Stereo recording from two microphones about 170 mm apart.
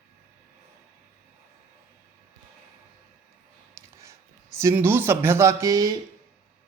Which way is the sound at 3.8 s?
15° right (ahead or behind).